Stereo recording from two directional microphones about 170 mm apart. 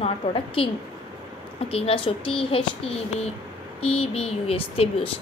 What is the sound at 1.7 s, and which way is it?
A woman's voice, 35° left (ahead or behind).